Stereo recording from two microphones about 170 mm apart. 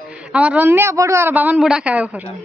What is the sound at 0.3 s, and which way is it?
A woman's voice, 5° right (ahead or behind).